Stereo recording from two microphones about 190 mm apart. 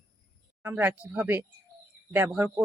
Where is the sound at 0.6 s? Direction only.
10° right (ahead or behind).